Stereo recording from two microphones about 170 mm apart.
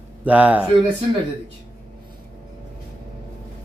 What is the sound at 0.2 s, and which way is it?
Speech, 10° right (ahead or behind).